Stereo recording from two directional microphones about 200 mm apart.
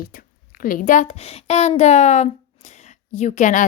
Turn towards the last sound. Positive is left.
turn(degrees=40)  # may be behind; listen again after turning